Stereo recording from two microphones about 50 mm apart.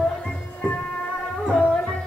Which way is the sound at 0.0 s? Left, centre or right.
Centre.